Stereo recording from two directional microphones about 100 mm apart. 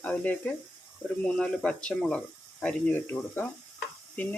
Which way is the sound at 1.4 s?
10° left (ahead or behind).